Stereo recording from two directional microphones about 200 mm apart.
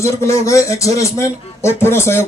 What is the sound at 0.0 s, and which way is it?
Speech, 15° left (ahead or behind).